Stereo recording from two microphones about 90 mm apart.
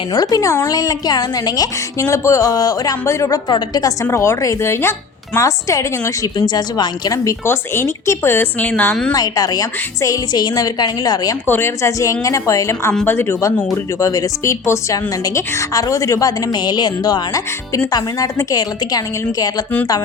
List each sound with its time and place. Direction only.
0.1 s a woman's voice: 45° left (ahead or behind)
4.0 s speech: 30° left (ahead or behind)
6.3 s a woman's voice: 50° left (ahead or behind)
7.4 s speech: 25° left (ahead or behind)
9.1 s a woman's voice: 45° left (ahead or behind)
11.4 s speech: 25° left (ahead or behind)
14.0 s speech: 40° left (ahead or behind)
16.5 s a woman's voice: 50° left (ahead or behind)